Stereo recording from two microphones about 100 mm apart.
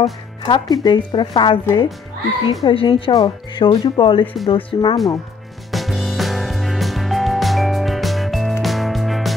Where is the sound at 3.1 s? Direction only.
50° left (ahead or behind).